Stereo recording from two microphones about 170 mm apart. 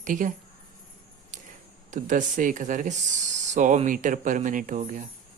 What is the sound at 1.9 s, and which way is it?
Speech, 50° right (ahead or behind).